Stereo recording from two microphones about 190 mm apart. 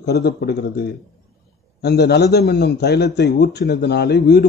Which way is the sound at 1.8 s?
60° left (ahead or behind).